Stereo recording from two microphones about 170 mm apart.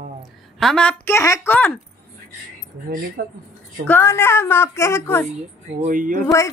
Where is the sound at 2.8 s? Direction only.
60° right (ahead or behind).